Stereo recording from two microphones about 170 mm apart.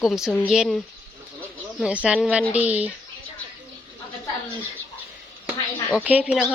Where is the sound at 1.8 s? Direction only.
5° right (ahead or behind).